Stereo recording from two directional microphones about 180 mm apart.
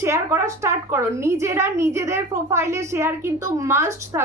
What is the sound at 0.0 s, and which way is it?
Speech, 15° right (ahead or behind).